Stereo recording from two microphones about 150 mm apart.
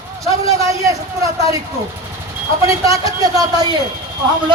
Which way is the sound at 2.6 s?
20° right (ahead or behind).